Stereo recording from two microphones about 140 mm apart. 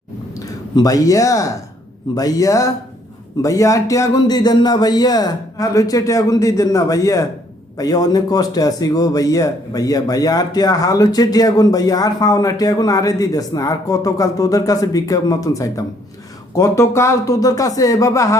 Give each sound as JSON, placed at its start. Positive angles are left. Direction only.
{"t": 0.3, "sound": "a man's voice", "side_deg": 25}